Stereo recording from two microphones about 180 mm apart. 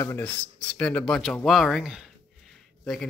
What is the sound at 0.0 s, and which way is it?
Speech, 10° left (ahead or behind).